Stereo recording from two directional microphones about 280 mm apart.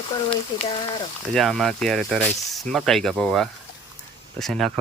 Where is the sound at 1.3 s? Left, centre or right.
Centre.